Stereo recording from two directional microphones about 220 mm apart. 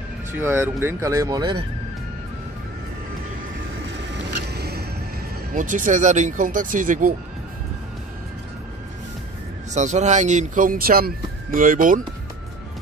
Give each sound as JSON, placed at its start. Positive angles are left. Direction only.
{"t": 0.3, "sound": "speech", "side_deg": -10}
{"t": 3.9, "sound": "music", "side_deg": -55}
{"t": 5.5, "sound": "speech", "side_deg": -35}
{"t": 9.8, "sound": "speech", "side_deg": -30}